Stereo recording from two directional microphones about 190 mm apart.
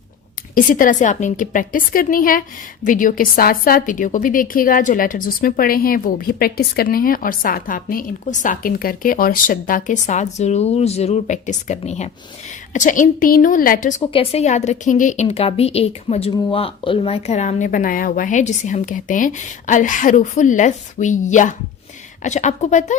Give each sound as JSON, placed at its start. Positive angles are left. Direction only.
{"t": 0.5, "sound": "a woman's voice", "side_deg": 45}
{"t": 14.1, "sound": "speech", "side_deg": 30}